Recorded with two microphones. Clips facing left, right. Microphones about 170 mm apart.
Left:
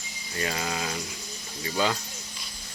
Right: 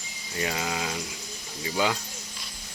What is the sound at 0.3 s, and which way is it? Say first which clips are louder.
Speech: right 1 dB; 15° right (ahead or behind).